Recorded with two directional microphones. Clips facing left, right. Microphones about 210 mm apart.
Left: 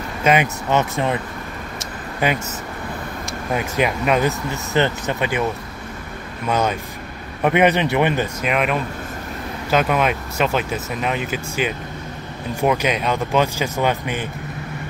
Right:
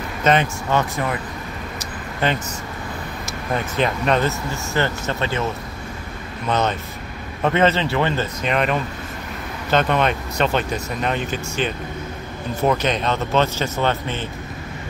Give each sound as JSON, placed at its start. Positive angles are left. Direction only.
{"t": 0.2, "sound": "speech", "side_deg": 10}
{"t": 2.2, "sound": "speech", "side_deg": 10}
{"t": 3.5, "sound": "speech", "side_deg": 10}